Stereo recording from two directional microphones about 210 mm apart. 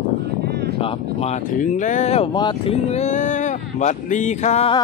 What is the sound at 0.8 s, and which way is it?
Speech, 30° left (ahead or behind).